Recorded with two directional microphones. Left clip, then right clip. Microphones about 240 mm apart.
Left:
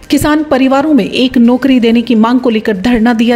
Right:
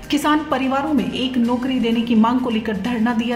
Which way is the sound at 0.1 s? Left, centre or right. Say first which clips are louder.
Left 8 dB; left.